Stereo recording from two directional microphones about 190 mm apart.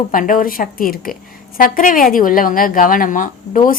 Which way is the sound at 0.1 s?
45° left (ahead or behind).